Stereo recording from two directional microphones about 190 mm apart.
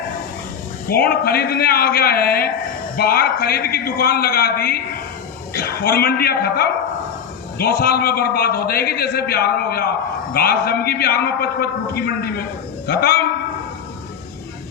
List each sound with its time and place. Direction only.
0.9 s a man's voice: 55° left (ahead or behind)